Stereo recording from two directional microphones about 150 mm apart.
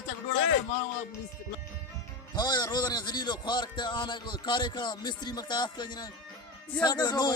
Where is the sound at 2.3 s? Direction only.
30° left (ahead or behind).